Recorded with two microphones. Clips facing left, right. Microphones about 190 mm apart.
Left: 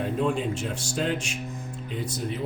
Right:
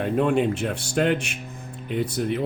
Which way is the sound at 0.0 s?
65° right (ahead or behind).